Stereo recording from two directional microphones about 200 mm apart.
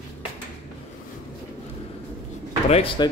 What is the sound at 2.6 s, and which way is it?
Speech, 30° left (ahead or behind).